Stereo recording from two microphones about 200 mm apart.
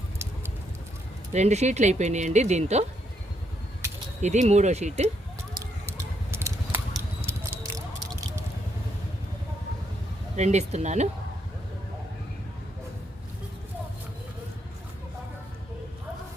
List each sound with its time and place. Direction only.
1.3 s speech: 35° right (ahead or behind)
4.2 s speech: 35° right (ahead or behind)
5.5 s a sound: 15° right (ahead or behind)
10.3 s speech: 35° right (ahead or behind)